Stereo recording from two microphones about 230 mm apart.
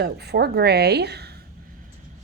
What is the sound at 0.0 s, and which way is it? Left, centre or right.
Speech, right.